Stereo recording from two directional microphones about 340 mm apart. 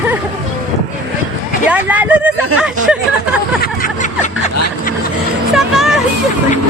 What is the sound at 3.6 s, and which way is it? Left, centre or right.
Snicker, left.